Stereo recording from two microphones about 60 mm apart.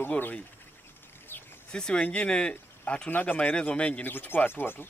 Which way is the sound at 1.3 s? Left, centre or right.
Left.